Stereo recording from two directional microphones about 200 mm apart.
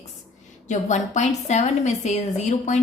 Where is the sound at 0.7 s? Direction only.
35° left (ahead or behind).